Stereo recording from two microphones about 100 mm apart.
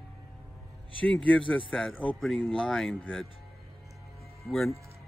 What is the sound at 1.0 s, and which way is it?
Speech, 10° left (ahead or behind).